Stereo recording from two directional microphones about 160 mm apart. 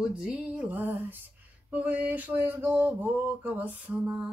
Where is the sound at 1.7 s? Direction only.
10° right (ahead or behind).